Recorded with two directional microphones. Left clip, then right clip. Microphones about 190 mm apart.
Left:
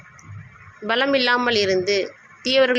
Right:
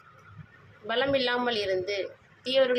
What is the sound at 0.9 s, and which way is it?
A woman's voice, 25° left (ahead or behind).